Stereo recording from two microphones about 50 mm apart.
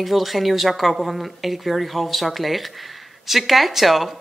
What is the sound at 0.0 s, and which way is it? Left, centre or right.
A woman's voice, centre.